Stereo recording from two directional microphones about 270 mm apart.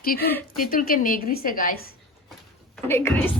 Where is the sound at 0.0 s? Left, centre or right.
Left.